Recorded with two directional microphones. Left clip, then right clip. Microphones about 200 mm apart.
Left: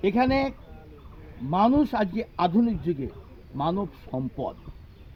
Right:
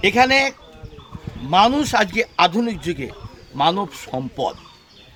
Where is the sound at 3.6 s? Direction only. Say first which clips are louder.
Right 10 dB; 35° right (ahead or behind).